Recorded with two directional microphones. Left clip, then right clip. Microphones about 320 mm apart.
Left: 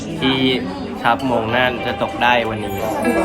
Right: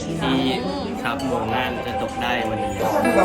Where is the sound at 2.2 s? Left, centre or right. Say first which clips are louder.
Left 10 dB; left.